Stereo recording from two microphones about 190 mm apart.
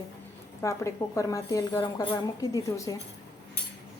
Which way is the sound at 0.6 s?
15° left (ahead or behind).